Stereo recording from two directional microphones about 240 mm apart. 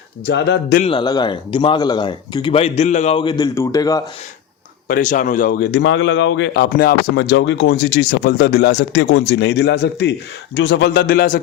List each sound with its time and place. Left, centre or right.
0.3 s a man's voice: left
0.8 s speech: left
4.9 s a man's voice: left